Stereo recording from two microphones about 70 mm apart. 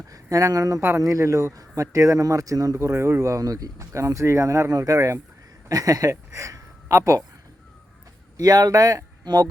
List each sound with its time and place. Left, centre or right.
0.1 s speech: right
0.8 s speech: right
1.0 s speech: right
5.6 s speech: right
8.4 s speech: right